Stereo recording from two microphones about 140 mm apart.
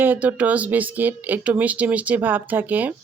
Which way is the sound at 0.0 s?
10° right (ahead or behind).